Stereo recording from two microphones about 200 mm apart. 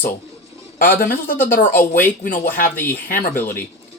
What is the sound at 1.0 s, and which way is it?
Speech, 45° left (ahead or behind).